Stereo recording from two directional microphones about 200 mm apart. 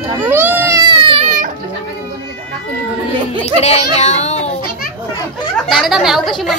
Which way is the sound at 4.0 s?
35° left (ahead or behind).